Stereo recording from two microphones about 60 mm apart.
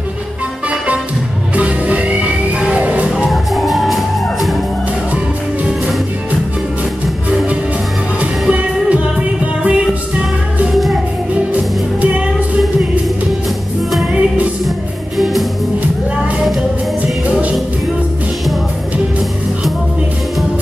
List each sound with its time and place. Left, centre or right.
1.5 s music: right
3.3 s music: centre
8.2 s music: right
15.1 s music: centre
17.3 s music: centre